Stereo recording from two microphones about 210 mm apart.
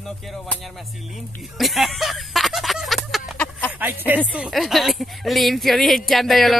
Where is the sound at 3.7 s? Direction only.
10° right (ahead or behind).